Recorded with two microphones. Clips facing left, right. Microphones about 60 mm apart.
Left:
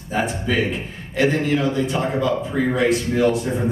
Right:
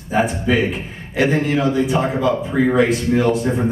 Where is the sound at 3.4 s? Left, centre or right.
Right.